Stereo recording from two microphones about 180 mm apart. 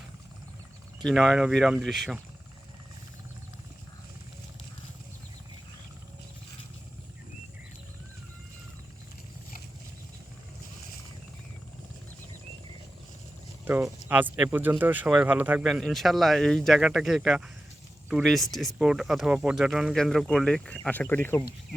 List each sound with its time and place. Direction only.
1.0 s a man's voice: centre (ahead or behind)
14.1 s a man's voice: 10° right (ahead or behind); by 21.8 s 10° left (ahead or behind)